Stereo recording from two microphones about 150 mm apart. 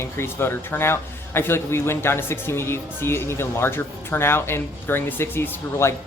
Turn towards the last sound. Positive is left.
turn(degrees=15)  # may be behind; listen again after turning